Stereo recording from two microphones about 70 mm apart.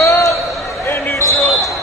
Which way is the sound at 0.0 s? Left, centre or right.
Left.